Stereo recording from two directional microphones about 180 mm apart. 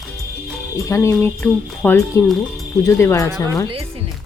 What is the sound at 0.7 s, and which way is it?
Speech, 15° left (ahead or behind).